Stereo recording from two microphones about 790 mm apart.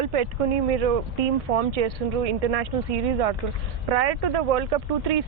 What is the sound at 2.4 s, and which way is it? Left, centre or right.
Speech, right.